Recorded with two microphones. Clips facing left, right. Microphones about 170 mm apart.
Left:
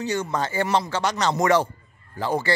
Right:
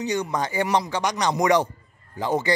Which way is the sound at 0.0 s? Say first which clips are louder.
Even; 15° right (ahead or behind).